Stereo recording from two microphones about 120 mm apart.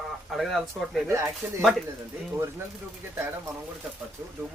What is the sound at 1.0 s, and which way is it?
Speech, 20° right (ahead or behind).